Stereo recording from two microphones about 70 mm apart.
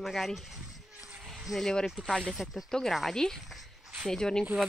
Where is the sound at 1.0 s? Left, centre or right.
Centre.